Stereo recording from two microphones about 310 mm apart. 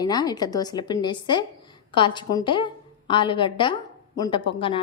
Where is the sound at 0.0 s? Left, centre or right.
Centre.